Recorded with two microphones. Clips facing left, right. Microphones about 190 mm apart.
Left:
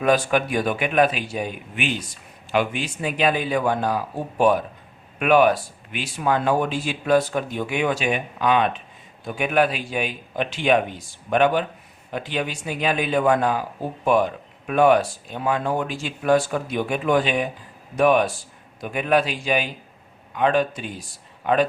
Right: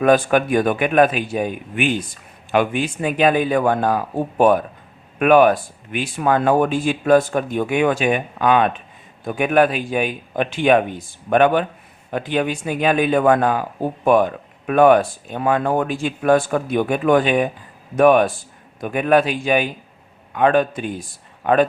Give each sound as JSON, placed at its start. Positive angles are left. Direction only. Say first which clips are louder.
{"t": 0.0, "sound": "speech", "louder": "right 5 dB", "side_deg": -50}